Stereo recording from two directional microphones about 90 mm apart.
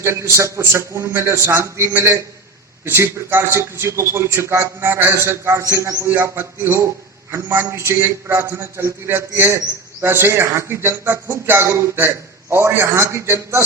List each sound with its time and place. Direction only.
0.0 s a man's voice: 30° right (ahead or behind)